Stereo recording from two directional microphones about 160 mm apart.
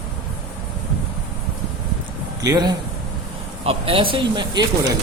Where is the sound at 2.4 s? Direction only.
25° right (ahead or behind).